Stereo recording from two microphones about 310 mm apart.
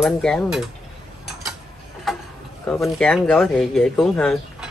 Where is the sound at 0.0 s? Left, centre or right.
Centre.